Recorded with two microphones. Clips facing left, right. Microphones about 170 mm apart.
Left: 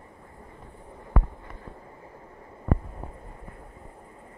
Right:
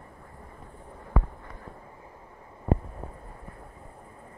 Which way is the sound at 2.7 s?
25° right (ahead or behind).